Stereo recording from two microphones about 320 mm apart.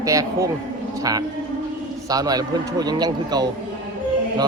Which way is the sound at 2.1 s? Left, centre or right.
Centre.